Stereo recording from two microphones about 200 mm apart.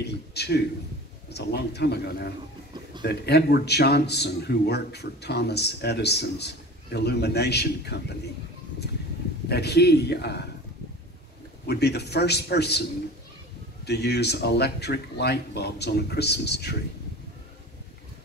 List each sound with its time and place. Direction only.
0.0 s a man's voice: 55° left (ahead or behind)
9.5 s speech: 55° left (ahead or behind)
11.6 s speech: 55° left (ahead or behind)
13.8 s speech: 55° left (ahead or behind)